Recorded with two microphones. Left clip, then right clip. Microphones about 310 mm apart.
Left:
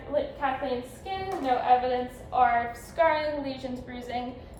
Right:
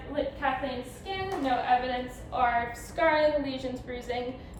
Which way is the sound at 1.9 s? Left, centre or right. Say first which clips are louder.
Left 3 dB; centre.